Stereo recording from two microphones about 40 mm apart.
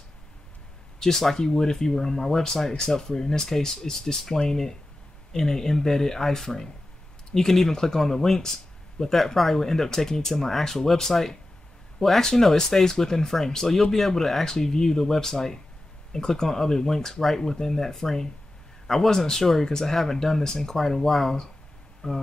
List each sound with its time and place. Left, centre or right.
0.9 s speech: centre
20.7 s speech: centre